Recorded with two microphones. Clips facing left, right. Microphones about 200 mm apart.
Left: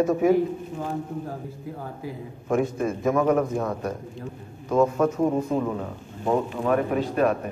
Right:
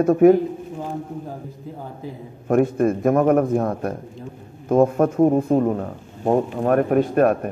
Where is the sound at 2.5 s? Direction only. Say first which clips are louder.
Right 6 dB; 55° right (ahead or behind).